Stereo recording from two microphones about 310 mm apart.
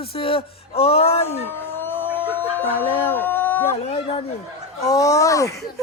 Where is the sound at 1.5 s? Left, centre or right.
Centre.